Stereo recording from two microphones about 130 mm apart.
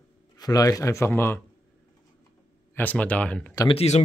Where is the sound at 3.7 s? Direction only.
55° left (ahead or behind).